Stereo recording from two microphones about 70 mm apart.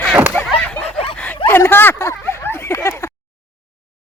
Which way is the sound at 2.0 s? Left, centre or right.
Left.